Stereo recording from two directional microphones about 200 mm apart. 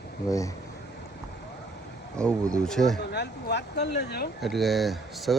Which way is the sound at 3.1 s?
55° left (ahead or behind).